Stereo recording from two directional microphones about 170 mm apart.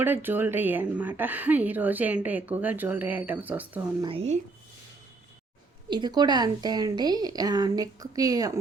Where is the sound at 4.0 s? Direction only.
30° right (ahead or behind).